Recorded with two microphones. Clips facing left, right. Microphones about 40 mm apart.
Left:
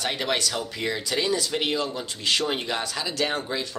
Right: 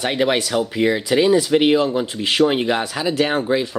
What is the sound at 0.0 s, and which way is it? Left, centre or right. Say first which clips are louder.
Speech: right 7 dB; right.